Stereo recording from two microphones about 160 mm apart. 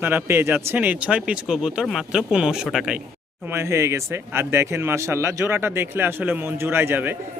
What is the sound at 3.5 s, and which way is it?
Speech, 15° right (ahead or behind).